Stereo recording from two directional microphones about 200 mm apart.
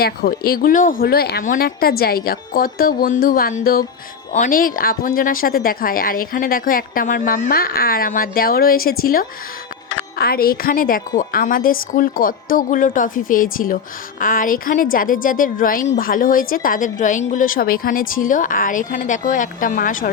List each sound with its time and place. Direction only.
0.0 s speech: 50° left (ahead or behind)